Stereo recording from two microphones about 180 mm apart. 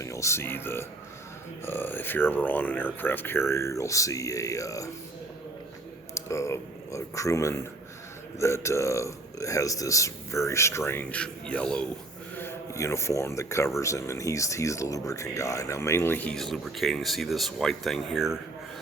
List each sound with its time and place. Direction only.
0.0 s speech: 15° left (ahead or behind)
6.1 s speech: 15° left (ahead or behind)
12.4 s speech: 15° left (ahead or behind); by 18.3 s centre (ahead or behind)